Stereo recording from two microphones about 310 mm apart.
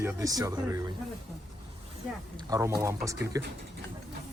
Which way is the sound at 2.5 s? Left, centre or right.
Centre.